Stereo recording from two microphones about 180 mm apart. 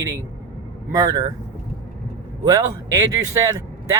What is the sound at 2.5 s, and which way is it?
Speech, 20° right (ahead or behind).